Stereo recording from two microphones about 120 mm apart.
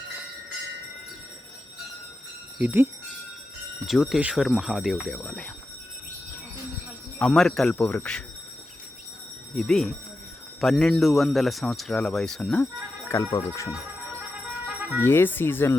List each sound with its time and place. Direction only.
2.6 s speech: 15° right (ahead or behind)
3.8 s speech: centre (ahead or behind)
7.2 s speech: 5° left (ahead or behind)
9.6 s speech: 5° left (ahead or behind)
13.3 s speech: 25° left (ahead or behind)
14.7 s music: 15° right (ahead or behind)
15.0 s speech: 20° left (ahead or behind)